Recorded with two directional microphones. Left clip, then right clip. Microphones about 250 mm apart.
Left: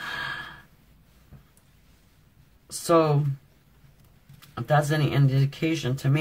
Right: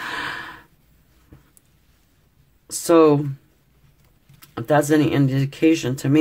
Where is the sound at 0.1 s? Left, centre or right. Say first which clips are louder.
Right 4 dB; right.